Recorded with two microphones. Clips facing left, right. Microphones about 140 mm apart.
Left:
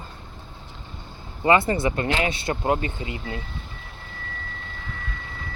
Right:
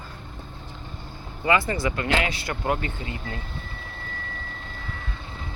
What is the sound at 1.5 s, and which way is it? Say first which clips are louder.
Speech: left 3 dB; 25° left (ahead or behind).